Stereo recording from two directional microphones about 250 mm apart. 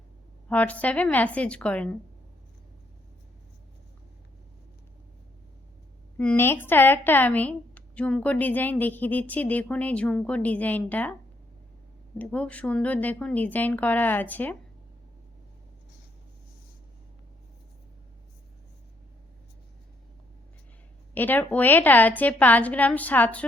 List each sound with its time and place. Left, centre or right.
0.4 s a woman's voice: centre
6.1 s a woman's voice: centre
12.2 s a woman's voice: centre
21.2 s a woman's voice: centre